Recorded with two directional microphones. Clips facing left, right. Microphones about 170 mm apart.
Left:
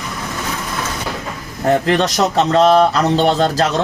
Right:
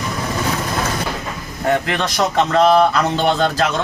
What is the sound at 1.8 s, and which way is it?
Speech, 35° left (ahead or behind).